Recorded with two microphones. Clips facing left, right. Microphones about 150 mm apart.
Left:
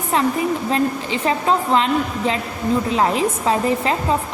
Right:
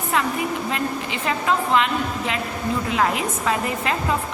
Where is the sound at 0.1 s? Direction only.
30° left (ahead or behind).